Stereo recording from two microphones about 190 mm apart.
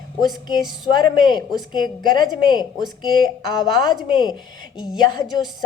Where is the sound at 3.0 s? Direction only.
25° left (ahead or behind).